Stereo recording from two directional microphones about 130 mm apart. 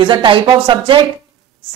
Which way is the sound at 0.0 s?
40° right (ahead or behind).